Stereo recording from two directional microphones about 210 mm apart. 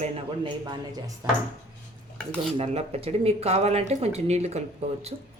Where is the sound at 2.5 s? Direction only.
30° right (ahead or behind).